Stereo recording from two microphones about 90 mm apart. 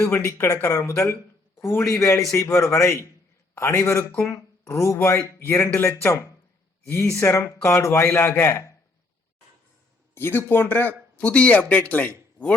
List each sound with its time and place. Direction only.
0.1 s a man's voice: 30° left (ahead or behind)
10.2 s speech: 25° left (ahead or behind)